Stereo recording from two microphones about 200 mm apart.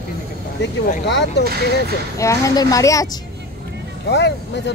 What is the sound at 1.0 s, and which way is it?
Speech, 60° left (ahead or behind).